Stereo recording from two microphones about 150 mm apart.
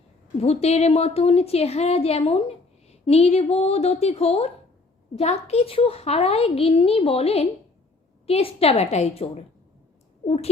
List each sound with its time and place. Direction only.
0.3 s a woman's voice: 45° left (ahead or behind)